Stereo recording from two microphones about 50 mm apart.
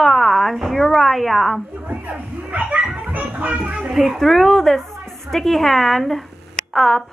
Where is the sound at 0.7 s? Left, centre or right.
Centre.